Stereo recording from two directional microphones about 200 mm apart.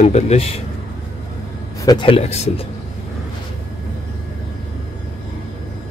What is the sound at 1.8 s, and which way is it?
Speech, 20° left (ahead or behind).